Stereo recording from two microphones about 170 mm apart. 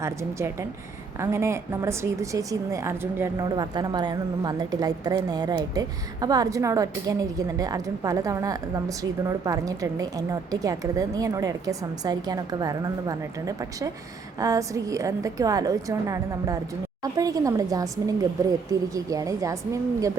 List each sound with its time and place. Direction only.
0.0 s a woman's voice: 15° right (ahead or behind)